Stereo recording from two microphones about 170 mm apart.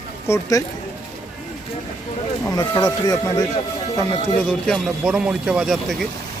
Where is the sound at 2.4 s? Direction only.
20° left (ahead or behind).